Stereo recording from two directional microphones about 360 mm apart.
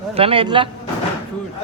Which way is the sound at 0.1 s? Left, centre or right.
Centre.